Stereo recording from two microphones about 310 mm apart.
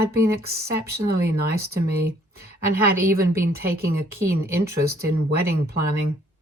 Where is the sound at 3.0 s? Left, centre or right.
Right.